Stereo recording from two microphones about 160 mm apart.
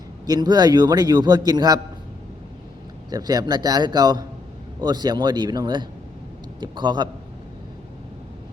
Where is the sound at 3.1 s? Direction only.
25° right (ahead or behind).